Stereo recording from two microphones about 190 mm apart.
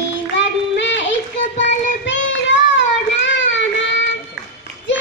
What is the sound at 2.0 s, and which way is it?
Child singing, 75° left (ahead or behind).